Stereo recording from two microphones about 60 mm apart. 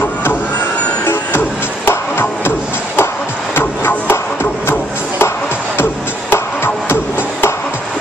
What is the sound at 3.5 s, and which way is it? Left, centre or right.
Music, left.